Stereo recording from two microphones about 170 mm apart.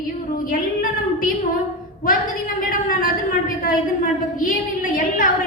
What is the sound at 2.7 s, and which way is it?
Speech, 55° left (ahead or behind).